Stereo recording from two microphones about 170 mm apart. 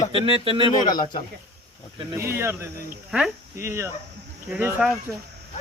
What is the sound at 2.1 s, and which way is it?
Speech, 15° right (ahead or behind).